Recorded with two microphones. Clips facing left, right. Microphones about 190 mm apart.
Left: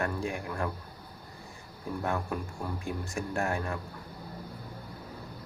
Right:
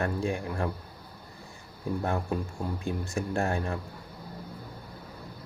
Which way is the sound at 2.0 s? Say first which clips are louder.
Right 1 dB; 30° right (ahead or behind).